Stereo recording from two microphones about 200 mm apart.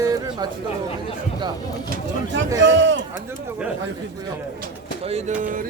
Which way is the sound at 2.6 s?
60° right (ahead or behind).